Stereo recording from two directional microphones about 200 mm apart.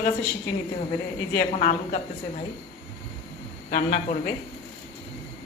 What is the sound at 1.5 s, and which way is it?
Speech, 35° left (ahead or behind).